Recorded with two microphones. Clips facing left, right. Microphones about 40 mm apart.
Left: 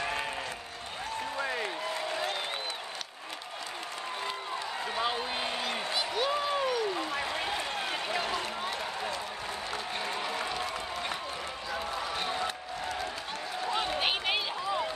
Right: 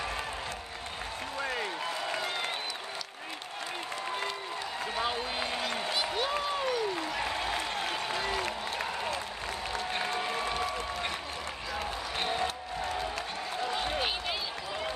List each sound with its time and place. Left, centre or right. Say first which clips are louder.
1.4 s applause: even; centre
5.0 s a sound: left 1 dB; centre
5.9 s applause: left 2 dB; centre
7.2 s run: right 1 dB; centre
10.0 s applause: right 2 dB; centre
13.7 s a sound: left 4 dB; left